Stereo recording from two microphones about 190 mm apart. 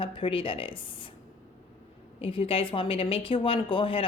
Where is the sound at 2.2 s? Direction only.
30° left (ahead or behind).